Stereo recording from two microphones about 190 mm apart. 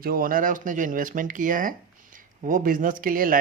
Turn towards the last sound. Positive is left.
turn(degrees=-50)  # may be behind; listen again after turning